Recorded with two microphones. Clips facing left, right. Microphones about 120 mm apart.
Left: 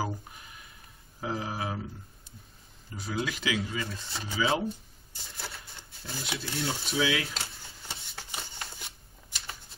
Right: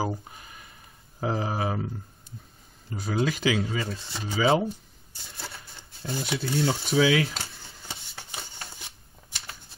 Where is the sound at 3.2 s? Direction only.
35° right (ahead or behind).